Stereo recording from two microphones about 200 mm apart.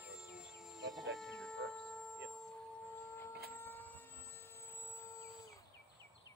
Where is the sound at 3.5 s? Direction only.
10° left (ahead or behind).